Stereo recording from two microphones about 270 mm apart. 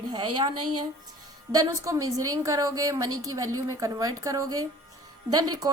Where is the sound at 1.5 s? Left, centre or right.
Centre.